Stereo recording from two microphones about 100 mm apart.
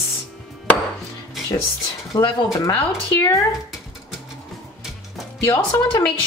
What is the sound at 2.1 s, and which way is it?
Speech, 45° left (ahead or behind).